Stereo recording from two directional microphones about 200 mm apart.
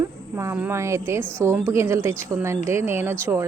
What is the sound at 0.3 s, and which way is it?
Speech, 15° right (ahead or behind).